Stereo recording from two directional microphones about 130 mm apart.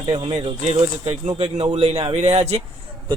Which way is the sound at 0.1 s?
55° right (ahead or behind).